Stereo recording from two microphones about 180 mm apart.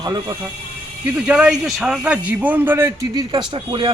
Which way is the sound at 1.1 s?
5° right (ahead or behind).